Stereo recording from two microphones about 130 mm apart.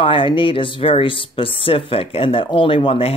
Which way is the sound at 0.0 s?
40° left (ahead or behind).